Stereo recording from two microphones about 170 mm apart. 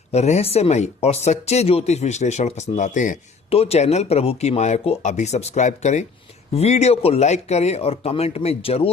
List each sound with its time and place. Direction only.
0.1 s speech: 40° left (ahead or behind)